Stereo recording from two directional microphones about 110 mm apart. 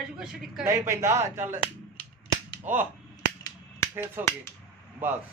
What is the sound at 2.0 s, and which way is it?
Cap gun, 55° left (ahead or behind).